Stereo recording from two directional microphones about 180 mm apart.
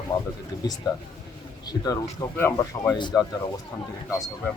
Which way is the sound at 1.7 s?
20° left (ahead or behind).